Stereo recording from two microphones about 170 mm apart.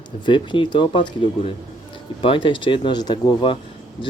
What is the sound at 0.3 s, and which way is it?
Speech, 30° left (ahead or behind).